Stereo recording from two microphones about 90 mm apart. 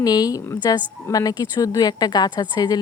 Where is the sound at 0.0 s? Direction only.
45° left (ahead or behind).